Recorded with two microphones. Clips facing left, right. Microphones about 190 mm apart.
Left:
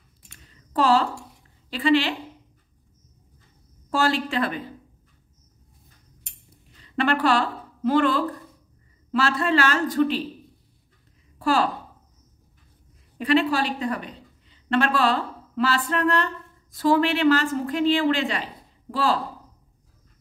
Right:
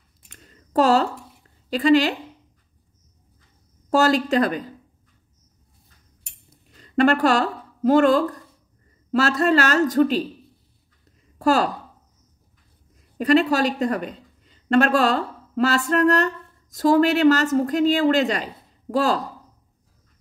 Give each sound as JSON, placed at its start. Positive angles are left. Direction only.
{"t": 0.4, "sound": "a sound", "side_deg": -45}
{"t": 1.7, "sound": "a woman's voice", "side_deg": -40}
{"t": 3.9, "sound": "a woman's voice", "side_deg": -40}
{"t": 6.8, "sound": "speech", "side_deg": -45}
{"t": 11.3, "sound": "speech", "side_deg": -45}
{"t": 13.2, "sound": "a woman's voice", "side_deg": -40}